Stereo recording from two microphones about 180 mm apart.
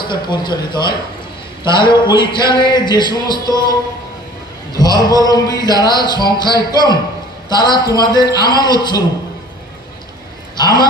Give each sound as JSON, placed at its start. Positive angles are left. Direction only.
{"t": 0.0, "sound": "music", "side_deg": 25}
{"t": 4.7, "sound": "music", "side_deg": 20}
{"t": 10.6, "sound": "music", "side_deg": 25}